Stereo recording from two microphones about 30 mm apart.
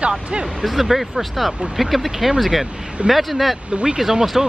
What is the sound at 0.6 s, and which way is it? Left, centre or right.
Speech, centre.